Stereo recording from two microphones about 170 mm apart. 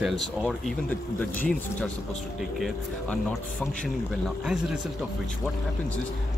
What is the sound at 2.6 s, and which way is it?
Speech, centre (ahead or behind).